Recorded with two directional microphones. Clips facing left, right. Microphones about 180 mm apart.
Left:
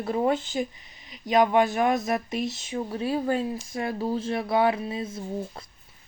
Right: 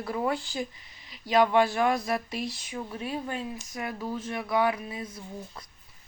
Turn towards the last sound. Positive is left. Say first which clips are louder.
# left 6 dB
turn(degrees=25)  # may be behind; listen again after turning